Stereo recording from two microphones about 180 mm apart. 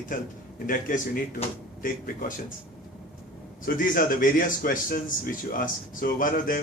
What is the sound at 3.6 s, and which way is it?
A man's voice, 50° left (ahead or behind).